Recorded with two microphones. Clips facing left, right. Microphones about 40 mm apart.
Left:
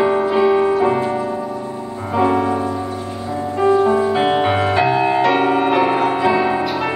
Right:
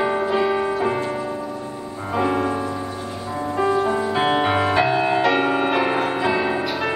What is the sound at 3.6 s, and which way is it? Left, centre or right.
Music, centre.